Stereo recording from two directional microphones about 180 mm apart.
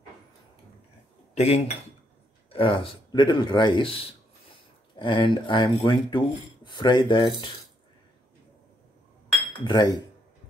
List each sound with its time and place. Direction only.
1.3 s speech: 35° left (ahead or behind)
9.7 s speech: 25° left (ahead or behind)